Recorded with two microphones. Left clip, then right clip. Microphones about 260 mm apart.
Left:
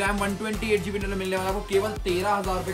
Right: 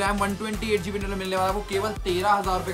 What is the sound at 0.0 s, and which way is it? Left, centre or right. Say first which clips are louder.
Speech: right 1 dB; centre.